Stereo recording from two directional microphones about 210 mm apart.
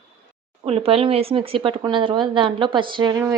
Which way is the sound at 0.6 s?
30° right (ahead or behind).